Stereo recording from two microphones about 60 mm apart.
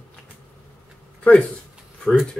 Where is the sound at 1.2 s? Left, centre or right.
Centre.